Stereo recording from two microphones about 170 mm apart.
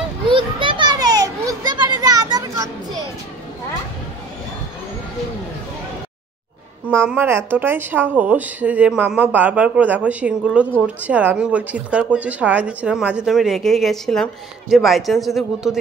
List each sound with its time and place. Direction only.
0.3 s children playing: 30° right (ahead or behind)
6.9 s speech: 15° right (ahead or behind)